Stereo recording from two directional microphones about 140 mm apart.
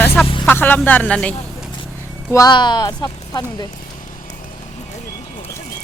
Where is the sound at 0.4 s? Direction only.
15° left (ahead or behind).